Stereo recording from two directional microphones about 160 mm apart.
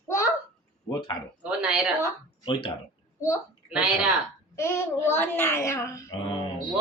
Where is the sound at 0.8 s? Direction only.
30° left (ahead or behind).